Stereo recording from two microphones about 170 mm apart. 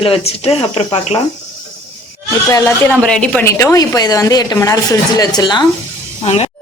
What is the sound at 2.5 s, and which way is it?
A woman's voice, 20° left (ahead or behind).